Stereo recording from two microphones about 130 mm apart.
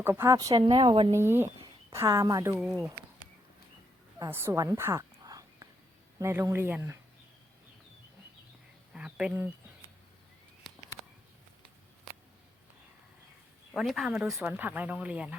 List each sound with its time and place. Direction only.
0.0 s speech: 20° right (ahead or behind)
0.6 s speech: 35° right (ahead or behind)
1.1 s speech: 20° right (ahead or behind)
2.6 s a woman's voice: 5° left (ahead or behind)
4.3 s whispering: 20° right (ahead or behind)
6.1 s speech: 20° right (ahead or behind)
8.9 s a sound: 10° right (ahead or behind)
13.7 s a woman's voice: centre (ahead or behind)
14.3 s speech: 20° right (ahead or behind)